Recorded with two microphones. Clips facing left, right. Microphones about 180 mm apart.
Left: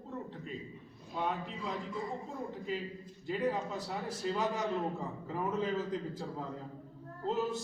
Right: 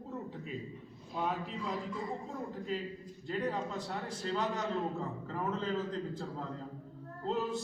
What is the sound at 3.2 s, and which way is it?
A man's voice, 5° left (ahead or behind).